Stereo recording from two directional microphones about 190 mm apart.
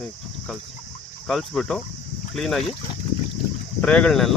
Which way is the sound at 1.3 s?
Centre (ahead or behind).